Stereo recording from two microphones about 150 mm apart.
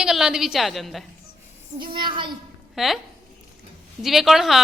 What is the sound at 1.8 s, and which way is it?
Speech, 35° right (ahead or behind).